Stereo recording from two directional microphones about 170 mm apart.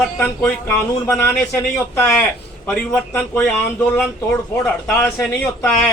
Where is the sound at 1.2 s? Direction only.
15° left (ahead or behind).